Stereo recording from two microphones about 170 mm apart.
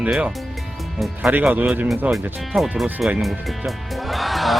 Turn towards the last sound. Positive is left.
turn(degrees=0)  # may be behind; listen again after turning